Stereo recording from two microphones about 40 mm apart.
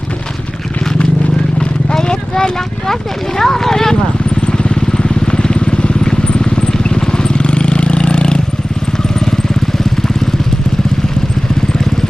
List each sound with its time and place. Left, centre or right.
1.6 s speech: left
4.4 s vehicle: left